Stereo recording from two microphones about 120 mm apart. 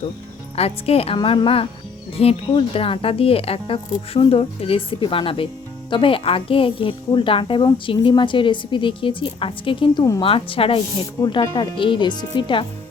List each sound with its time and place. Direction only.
0.5 s speech: 55° left (ahead or behind); by 10.2 s 35° left (ahead or behind)
10.2 s speech: 50° left (ahead or behind)
11.2 s speech: 40° left (ahead or behind)